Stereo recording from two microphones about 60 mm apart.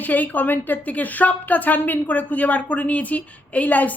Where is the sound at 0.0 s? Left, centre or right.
Left.